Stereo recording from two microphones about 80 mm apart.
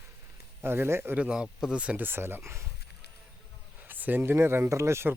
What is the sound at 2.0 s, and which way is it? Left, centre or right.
Speech, right.